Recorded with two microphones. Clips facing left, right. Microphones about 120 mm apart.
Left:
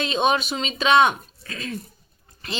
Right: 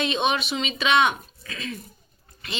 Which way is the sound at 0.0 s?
35° left (ahead or behind).